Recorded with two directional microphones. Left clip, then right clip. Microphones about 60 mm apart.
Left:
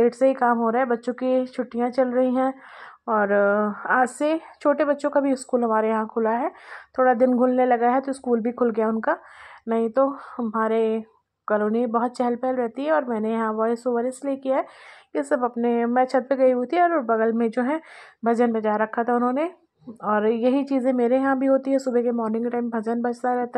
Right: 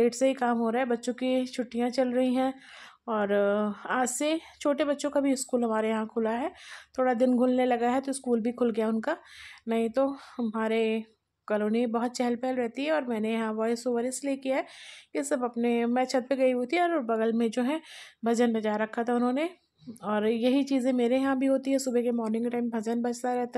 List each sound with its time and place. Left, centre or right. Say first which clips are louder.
0.1 s speech: left 7 dB; centre
4.0 s speech: left 6 dB; left; by 10.6 s centre
10.6 s speech: left 6 dB; centre